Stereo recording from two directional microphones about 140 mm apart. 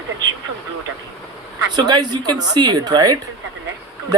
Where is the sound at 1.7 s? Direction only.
30° right (ahead or behind).